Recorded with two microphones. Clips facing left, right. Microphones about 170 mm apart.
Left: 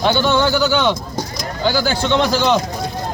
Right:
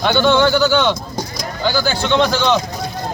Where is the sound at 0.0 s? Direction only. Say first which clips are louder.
Right 2 dB; 5° left (ahead or behind).